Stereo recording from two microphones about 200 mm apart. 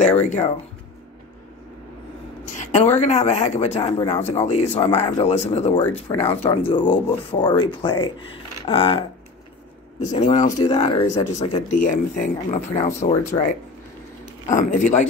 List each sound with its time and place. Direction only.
0.2 s speech: 35° left (ahead or behind)
2.5 s a sound: 35° left (ahead or behind)
3.0 s speech: 35° left (ahead or behind)
10.1 s speech: 35° left (ahead or behind)
11.7 s speech: 40° left (ahead or behind)
14.5 s speech: 40° left (ahead or behind)